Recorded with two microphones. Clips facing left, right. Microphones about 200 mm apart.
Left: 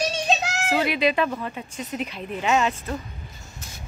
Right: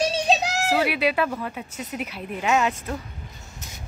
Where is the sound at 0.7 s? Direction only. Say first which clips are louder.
Left 1 dB; 10° right (ahead or behind).